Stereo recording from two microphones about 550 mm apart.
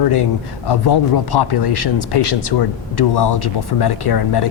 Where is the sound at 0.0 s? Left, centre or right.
Left.